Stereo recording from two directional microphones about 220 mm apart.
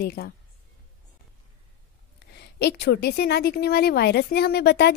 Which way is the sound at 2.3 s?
50° left (ahead or behind).